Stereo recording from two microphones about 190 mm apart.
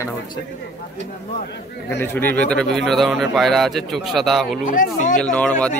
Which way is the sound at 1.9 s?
10° left (ahead or behind).